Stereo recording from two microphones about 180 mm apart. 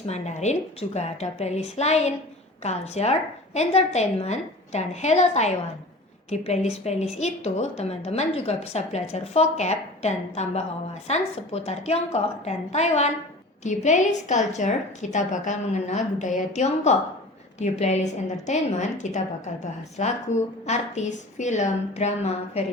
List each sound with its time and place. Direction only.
0.1 s a woman's voice: 40° left (ahead or behind)